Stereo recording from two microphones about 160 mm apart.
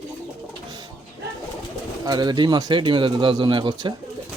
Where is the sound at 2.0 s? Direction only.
25° right (ahead or behind).